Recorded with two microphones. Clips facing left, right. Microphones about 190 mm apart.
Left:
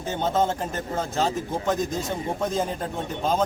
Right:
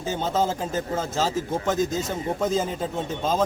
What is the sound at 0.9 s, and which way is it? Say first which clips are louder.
A man's voice: left 2 dB; 5° right (ahead or behind).